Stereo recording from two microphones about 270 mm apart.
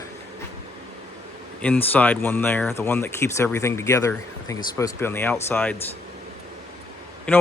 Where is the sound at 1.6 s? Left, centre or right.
Centre.